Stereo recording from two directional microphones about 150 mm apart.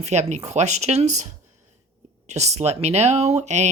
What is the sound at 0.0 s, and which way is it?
Speech, 50° right (ahead or behind).